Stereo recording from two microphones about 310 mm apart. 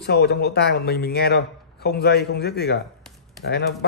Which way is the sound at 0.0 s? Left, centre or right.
Left.